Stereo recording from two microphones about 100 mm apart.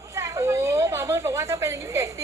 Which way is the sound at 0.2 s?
30° right (ahead or behind).